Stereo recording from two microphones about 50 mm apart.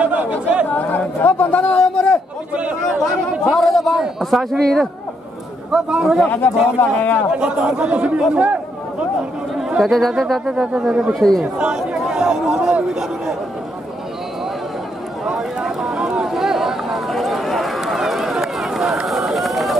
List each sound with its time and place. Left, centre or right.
0.0 s chatter: right
0.7 s speech: left
1.8 s a man's voice: centre
3.5 s a man's voice: centre
5.7 s a man's voice: centre
6.8 s speech: left
7.3 s speech: centre
9.8 s a man's voice: centre
11.1 s a man's voice: centre
11.5 s speech: right
15.2 s a sound: centre
19.0 s run: centre